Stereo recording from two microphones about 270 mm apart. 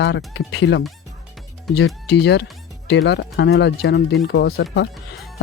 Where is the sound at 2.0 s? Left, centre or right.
Left.